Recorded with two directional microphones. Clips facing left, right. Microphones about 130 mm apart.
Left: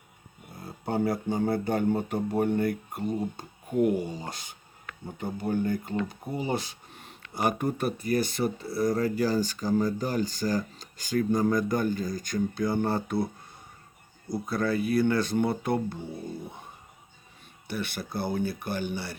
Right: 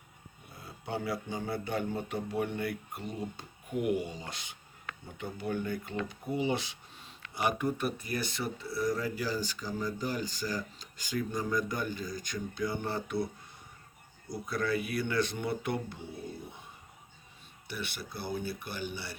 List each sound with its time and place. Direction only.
0.6 s speech: 45° left (ahead or behind)
6.9 s a sound: 55° left (ahead or behind)
7.3 s speech: 45° left (ahead or behind)
14.4 s speech: 35° left (ahead or behind)
17.7 s speech: 50° left (ahead or behind)